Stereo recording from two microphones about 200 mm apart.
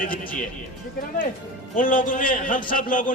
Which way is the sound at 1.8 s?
40° left (ahead or behind).